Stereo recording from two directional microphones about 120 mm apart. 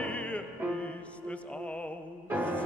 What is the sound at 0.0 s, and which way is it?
Music, 10° left (ahead or behind).